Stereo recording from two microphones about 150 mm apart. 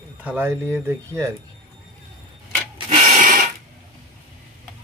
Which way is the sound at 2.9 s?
60° right (ahead or behind).